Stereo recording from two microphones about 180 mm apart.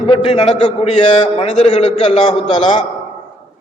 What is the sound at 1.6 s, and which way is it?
Speech, 40° left (ahead or behind).